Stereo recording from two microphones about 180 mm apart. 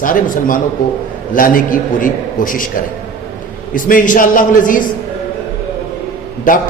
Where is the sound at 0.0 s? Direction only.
50° left (ahead or behind).